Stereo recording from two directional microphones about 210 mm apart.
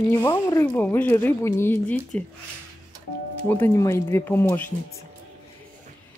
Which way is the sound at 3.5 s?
10° left (ahead or behind).